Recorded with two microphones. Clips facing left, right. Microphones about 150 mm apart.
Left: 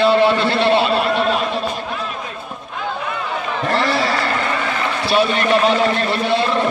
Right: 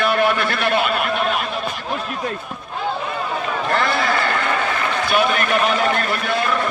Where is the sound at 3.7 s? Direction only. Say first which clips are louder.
Left 2 dB; 35° left (ahead or behind).